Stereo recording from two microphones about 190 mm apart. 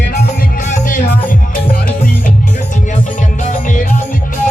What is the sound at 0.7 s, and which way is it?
Music, 45° left (ahead or behind).